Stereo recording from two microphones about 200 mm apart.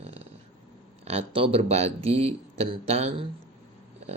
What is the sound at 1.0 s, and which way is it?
Speech, 30° right (ahead or behind).